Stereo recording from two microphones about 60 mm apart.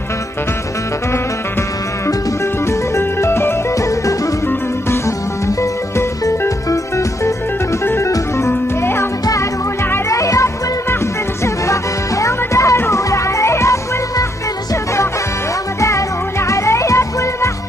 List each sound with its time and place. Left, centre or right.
2.6 s music: left
5.6 s music: left
7.8 s music: left
9.2 s music: left
15.8 s music: left